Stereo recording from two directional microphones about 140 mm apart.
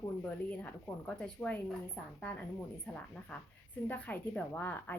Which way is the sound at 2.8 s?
10° left (ahead or behind).